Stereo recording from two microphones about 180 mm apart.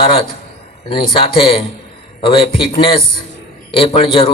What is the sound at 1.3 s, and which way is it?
A man's voice, 30° left (ahead or behind).